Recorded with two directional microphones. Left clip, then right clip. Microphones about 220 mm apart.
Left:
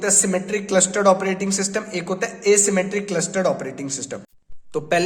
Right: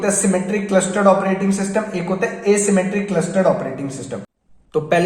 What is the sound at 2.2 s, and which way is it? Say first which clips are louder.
Speech: right 1 dB; 45° left (ahead or behind).